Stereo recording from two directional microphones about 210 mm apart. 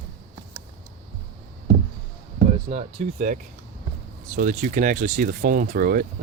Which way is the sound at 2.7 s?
30° right (ahead or behind).